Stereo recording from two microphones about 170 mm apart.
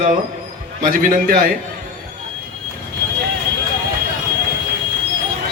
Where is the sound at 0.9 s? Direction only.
55° right (ahead or behind).